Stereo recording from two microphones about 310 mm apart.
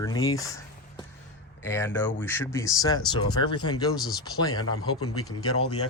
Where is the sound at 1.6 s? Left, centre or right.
Centre.